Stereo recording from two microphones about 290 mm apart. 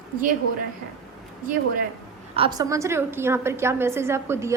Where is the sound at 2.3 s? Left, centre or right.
Centre.